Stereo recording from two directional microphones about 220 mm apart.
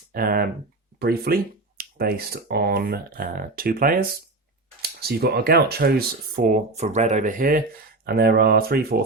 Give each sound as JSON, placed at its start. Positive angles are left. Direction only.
{"t": 0.1, "sound": "speech", "side_deg": -40}